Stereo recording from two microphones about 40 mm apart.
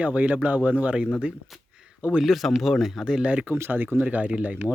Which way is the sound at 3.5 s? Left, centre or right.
Right.